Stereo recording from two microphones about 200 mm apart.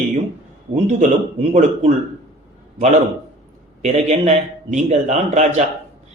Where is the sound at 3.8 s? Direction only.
35° right (ahead or behind).